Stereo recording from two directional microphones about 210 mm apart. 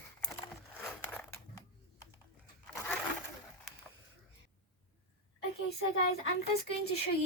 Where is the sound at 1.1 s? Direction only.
15° left (ahead or behind).